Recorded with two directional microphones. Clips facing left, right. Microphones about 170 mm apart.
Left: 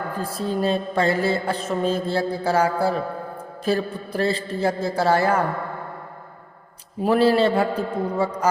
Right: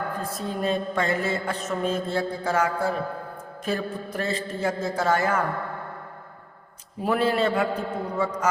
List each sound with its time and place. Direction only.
0.2 s mantra: 30° left (ahead or behind)
7.0 s mantra: 30° left (ahead or behind)